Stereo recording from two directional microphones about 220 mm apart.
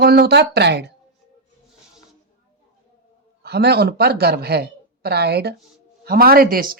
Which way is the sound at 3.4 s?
45° right (ahead or behind).